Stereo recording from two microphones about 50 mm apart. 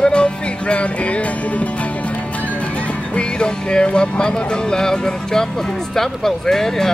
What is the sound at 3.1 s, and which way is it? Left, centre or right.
Music, centre.